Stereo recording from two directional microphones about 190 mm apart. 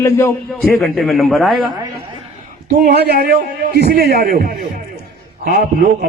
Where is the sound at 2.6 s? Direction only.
55° right (ahead or behind).